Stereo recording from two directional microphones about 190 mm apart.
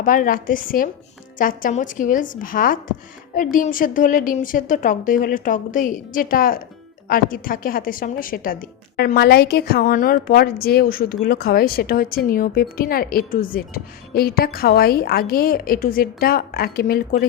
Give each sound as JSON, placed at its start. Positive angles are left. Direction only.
{"t": 0.0, "sound": "speech", "side_deg": 45}